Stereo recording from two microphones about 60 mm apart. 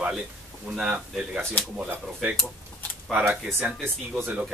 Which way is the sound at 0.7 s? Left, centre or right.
Centre.